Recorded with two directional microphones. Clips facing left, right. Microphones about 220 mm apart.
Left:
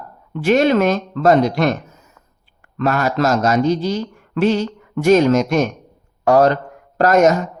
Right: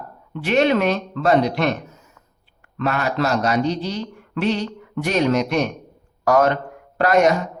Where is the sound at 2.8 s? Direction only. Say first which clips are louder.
Left 4 dB; 40° left (ahead or behind).